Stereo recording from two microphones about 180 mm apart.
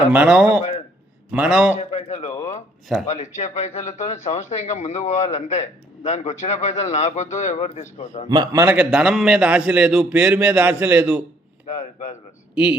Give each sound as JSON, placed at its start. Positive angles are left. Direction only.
{"t": 0.1, "sound": "speech", "side_deg": -5}
{"t": 1.7, "sound": "a man's voice", "side_deg": 40}
{"t": 8.3, "sound": "a man's voice", "side_deg": -20}
{"t": 8.6, "sound": "a man's voice", "side_deg": -5}
{"t": 11.6, "sound": "a man's voice", "side_deg": 40}